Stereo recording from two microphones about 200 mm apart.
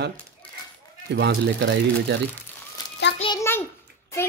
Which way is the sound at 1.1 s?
60° right (ahead or behind).